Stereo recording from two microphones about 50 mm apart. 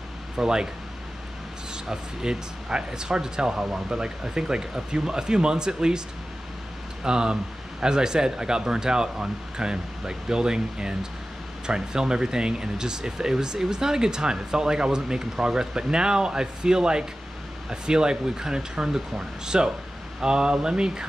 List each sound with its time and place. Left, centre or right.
0.4 s speech: centre
1.9 s speech: centre